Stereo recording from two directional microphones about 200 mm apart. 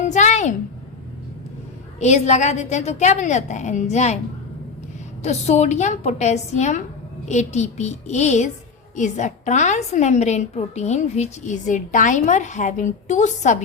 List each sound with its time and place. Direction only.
0.0 s a sound: 35° left (ahead or behind)
2.0 s a woman's voice: 35° left (ahead or behind)
5.2 s a woman's voice: 35° left (ahead or behind)